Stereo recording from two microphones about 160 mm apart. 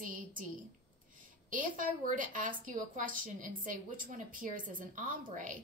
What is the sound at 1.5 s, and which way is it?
A woman's voice, 55° right (ahead or behind).